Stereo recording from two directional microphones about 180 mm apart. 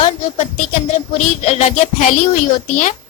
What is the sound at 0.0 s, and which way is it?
Music, 40° left (ahead or behind).